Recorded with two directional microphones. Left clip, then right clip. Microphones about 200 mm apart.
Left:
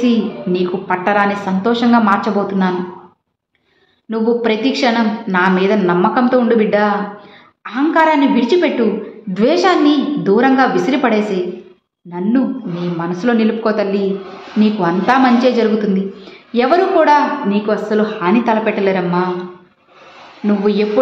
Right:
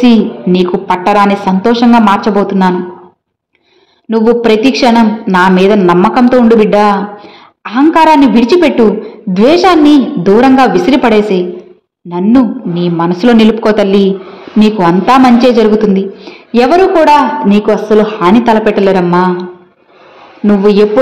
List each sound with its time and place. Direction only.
0.0 s a woman's voice: 35° right (ahead or behind)
4.1 s a woman's voice: 35° right (ahead or behind)
20.4 s a woman's voice: 35° right (ahead or behind)